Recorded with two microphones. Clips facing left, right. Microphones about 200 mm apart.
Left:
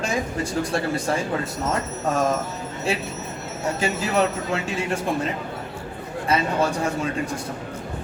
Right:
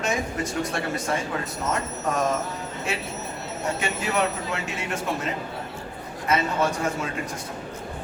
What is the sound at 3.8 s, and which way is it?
Speech, 30° left (ahead or behind).